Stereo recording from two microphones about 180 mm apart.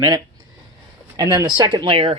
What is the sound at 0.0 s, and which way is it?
Speech, 20° right (ahead or behind).